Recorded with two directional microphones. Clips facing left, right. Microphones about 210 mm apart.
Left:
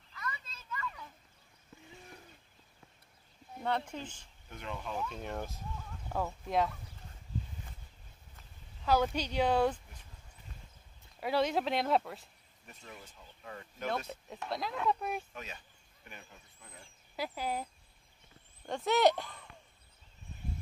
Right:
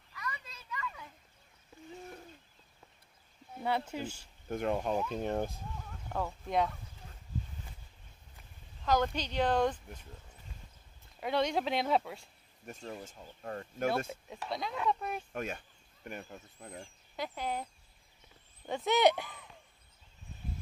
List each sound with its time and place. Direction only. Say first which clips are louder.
0.1 s children playing: even; 15° right (ahead or behind)
3.5 s speech: right 1 dB; 5° right (ahead or behind)
4.5 s speech: right 10 dB; 50° right (ahead or behind); by 5.6 s 35° right (ahead or behind)
6.0 s speech: even; 5° left (ahead or behind)
8.8 s speech: left 1 dB; 10° left (ahead or behind)
11.1 s speech: even; 5° left (ahead or behind)
12.6 s speech: right 8 dB; 40° right (ahead or behind)
14.3 s speech: left 1 dB; centre (ahead or behind)
15.3 s speech: right 9 dB; 50° right (ahead or behind)
17.1 s speech: even; 5° left (ahead or behind)
18.7 s speech: even; centre (ahead or behind)